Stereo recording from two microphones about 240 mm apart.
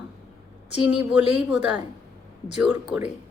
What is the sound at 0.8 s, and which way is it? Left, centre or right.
A woman's voice, centre.